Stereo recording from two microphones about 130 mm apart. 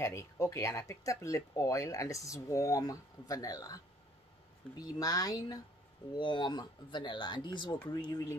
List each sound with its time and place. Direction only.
0.0 s speech: 20° left (ahead or behind)